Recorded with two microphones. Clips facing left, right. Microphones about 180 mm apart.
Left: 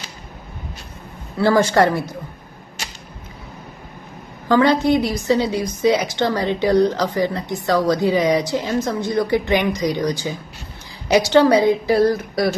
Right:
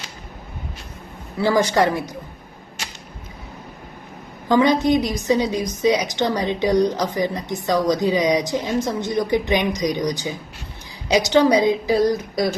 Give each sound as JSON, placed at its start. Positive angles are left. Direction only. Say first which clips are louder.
{"t": 1.4, "sound": "a woman's voice", "louder": "left 3 dB", "side_deg": -15}
{"t": 4.4, "sound": "a woman's voice", "louder": "left 1 dB", "side_deg": -15}